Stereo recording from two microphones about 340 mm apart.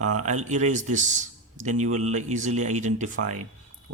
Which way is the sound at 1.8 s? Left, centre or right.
Right.